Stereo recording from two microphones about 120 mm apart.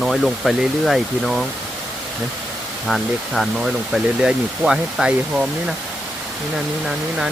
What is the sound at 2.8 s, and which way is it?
Speech, centre (ahead or behind).